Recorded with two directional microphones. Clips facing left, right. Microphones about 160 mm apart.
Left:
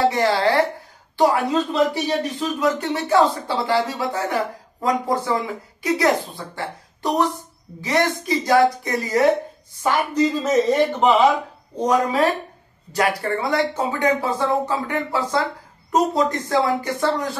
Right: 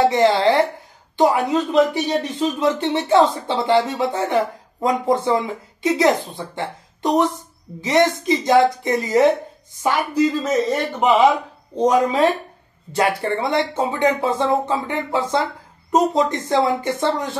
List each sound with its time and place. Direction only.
0.1 s speech: 20° right (ahead or behind)
10.1 s a man's voice: 10° right (ahead or behind); by 17.4 s 25° right (ahead or behind)